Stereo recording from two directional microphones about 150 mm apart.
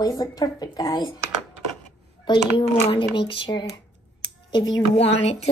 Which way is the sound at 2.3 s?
30° left (ahead or behind).